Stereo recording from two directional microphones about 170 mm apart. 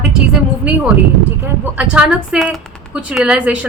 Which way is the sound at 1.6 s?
10° right (ahead or behind).